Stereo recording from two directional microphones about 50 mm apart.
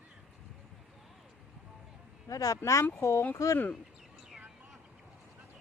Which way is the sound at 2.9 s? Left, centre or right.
Left.